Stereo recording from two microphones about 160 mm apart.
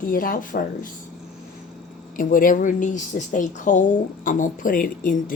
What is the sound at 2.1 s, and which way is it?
Speech, 60° left (ahead or behind).